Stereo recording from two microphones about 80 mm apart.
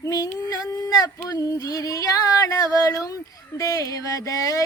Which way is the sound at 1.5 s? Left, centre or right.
Left.